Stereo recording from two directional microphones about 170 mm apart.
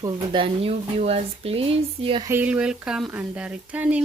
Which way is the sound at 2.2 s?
10° right (ahead or behind).